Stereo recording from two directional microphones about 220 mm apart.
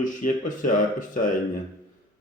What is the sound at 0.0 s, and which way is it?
Speech, 35° left (ahead or behind).